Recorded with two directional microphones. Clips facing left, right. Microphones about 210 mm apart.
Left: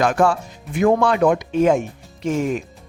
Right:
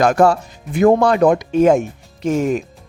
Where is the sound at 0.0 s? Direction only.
40° right (ahead or behind).